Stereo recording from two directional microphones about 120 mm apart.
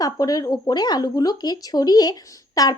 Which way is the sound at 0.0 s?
30° left (ahead or behind).